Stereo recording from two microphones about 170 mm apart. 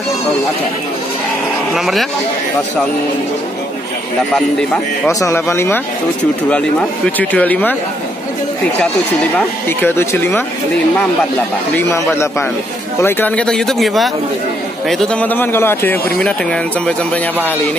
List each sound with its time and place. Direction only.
1.7 s speech: centre (ahead or behind)
5.0 s speech: 15° left (ahead or behind)
9.7 s speech: 10° left (ahead or behind)